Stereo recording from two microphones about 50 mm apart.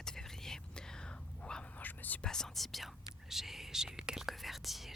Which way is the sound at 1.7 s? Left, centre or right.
Left.